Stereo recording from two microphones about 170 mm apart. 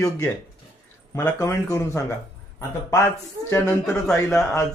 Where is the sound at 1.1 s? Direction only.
15° left (ahead or behind).